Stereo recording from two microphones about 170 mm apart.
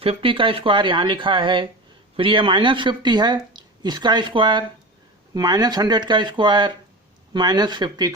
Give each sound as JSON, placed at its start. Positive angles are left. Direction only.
{"t": 0.0, "sound": "speech", "side_deg": -35}